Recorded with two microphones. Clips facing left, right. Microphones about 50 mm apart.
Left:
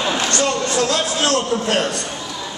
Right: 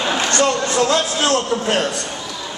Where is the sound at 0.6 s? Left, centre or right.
Right.